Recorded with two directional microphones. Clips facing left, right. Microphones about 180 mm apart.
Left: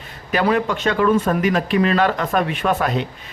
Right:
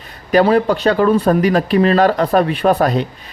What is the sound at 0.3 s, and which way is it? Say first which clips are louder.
Speech: right 6 dB; 35° right (ahead or behind).